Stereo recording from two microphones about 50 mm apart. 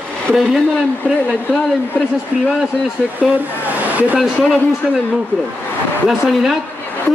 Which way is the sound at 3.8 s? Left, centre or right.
Right.